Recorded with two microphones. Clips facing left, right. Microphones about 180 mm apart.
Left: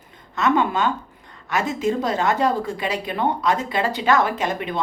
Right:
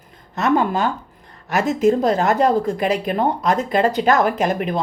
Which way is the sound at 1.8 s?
45° right (ahead or behind).